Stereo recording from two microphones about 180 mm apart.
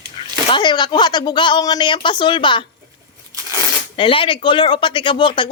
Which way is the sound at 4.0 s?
30° left (ahead or behind).